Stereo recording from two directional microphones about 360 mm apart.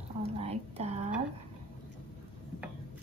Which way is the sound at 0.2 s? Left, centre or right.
Centre.